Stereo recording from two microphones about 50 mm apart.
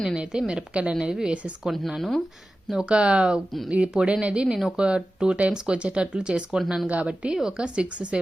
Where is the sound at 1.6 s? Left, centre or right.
Centre.